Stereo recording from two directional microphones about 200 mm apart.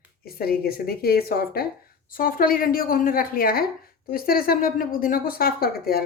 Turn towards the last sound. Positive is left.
turn(degrees=50)  # may be behind; listen again after turning